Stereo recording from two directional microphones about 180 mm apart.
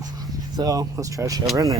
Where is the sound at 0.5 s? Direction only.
20° right (ahead or behind).